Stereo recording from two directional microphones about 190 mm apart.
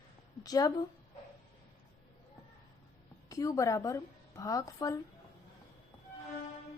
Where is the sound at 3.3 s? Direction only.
15° left (ahead or behind).